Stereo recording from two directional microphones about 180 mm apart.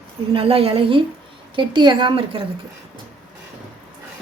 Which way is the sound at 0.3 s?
30° right (ahead or behind).